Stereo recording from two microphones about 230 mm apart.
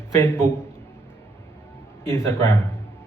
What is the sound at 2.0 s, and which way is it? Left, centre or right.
Speech, centre.